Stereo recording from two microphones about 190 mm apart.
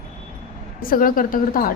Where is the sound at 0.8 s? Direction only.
50° left (ahead or behind).